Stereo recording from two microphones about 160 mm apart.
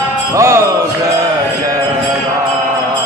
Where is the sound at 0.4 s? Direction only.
15° right (ahead or behind).